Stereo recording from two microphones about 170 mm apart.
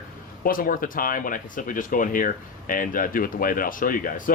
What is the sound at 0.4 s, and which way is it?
Speech, 55° left (ahead or behind).